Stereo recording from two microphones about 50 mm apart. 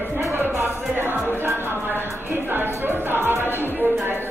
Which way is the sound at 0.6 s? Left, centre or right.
Right.